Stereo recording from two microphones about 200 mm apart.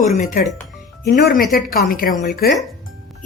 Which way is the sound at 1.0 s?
50° left (ahead or behind).